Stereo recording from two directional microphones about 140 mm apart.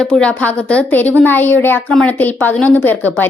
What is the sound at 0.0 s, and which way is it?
A woman's voice, 5° left (ahead or behind).